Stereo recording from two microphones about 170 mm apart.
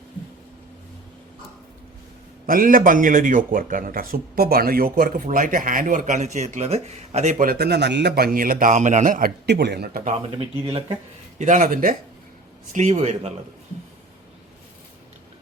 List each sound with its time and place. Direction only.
2.5 s a man's voice: 55° right (ahead or behind)
9.5 s speech: 80° right
10.3 s speech: 35° right (ahead or behind)
11.3 s a man's voice: 50° right (ahead or behind)
12.7 s speech: 40° right (ahead or behind)